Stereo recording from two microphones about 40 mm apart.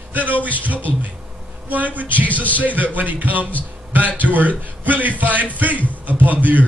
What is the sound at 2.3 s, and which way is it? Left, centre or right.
Speech, left.